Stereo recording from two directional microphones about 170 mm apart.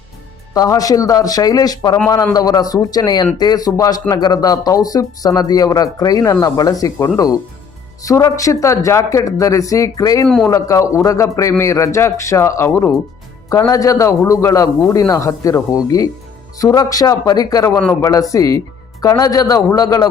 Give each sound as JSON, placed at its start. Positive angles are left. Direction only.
{"t": 0.5, "sound": "a man's voice", "side_deg": 20}
{"t": 10.2, "sound": "a man's voice", "side_deg": 5}
{"t": 10.5, "sound": "a man's voice", "side_deg": 20}